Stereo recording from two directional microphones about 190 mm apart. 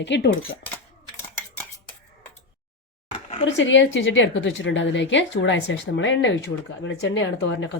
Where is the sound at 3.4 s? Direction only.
80° left.